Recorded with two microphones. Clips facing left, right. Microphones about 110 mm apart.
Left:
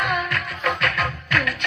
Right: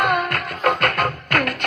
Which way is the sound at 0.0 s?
50° right (ahead or behind).